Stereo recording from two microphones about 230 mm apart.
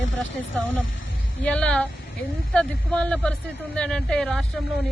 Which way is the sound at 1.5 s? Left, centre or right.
Centre.